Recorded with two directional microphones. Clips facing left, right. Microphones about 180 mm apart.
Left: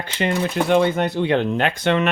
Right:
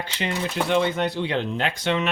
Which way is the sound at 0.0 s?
50° left (ahead or behind).